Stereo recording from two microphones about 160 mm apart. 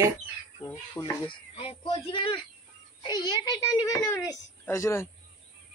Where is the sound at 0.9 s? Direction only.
30° left (ahead or behind).